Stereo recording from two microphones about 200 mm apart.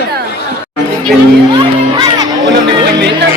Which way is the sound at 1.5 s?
20° right (ahead or behind).